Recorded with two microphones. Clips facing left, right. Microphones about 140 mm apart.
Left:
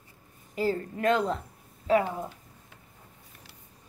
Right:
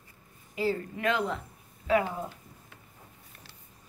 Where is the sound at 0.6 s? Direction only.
45° left (ahead or behind).